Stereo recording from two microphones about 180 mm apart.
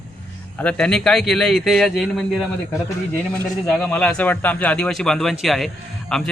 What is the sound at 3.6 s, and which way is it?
A man's voice, 10° left (ahead or behind).